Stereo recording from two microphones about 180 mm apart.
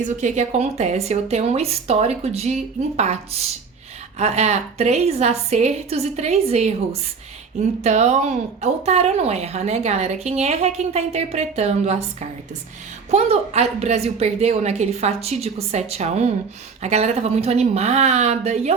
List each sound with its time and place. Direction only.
0.0 s speech: 40° right (ahead or behind)
7.9 s speech: 40° right (ahead or behind)